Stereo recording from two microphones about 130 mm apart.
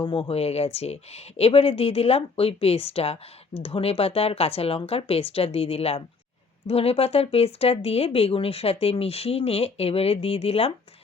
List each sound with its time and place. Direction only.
0.0 s speech: 45° left (ahead or behind)